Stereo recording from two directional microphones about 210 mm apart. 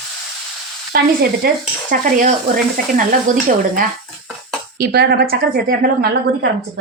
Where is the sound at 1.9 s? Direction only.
45° right (ahead or behind).